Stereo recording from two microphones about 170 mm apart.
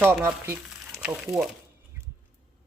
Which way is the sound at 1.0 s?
5° right (ahead or behind).